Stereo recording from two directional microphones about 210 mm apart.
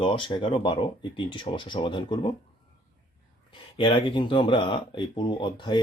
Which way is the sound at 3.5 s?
25° left (ahead or behind).